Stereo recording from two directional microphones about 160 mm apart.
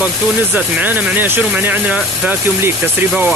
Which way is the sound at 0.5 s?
10° right (ahead or behind).